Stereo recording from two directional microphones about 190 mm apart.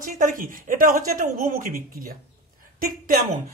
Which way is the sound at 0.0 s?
45° right (ahead or behind).